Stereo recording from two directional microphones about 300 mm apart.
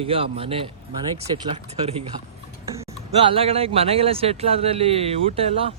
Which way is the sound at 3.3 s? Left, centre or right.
Centre.